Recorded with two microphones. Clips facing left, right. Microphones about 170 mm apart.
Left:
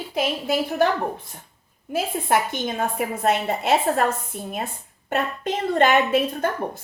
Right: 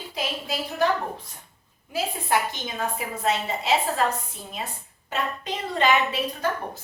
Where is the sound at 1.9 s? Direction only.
55° left (ahead or behind).